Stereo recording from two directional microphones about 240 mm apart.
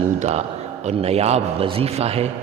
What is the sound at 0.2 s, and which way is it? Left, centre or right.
A man's voice, right.